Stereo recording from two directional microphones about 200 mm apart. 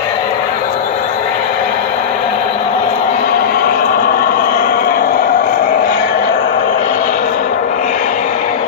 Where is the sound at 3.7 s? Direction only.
45° left (ahead or behind).